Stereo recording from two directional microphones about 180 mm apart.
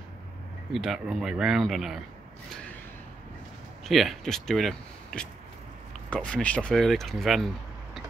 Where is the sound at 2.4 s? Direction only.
5° left (ahead or behind).